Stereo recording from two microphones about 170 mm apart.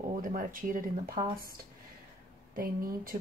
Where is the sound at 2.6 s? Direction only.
55° right (ahead or behind).